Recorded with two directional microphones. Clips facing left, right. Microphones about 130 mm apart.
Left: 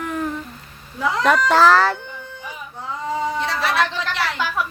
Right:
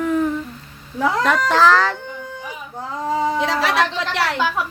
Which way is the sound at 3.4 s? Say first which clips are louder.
Right 2 dB; 90° right.